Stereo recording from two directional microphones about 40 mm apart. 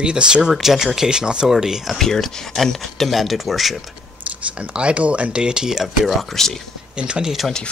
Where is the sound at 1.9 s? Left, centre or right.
Centre.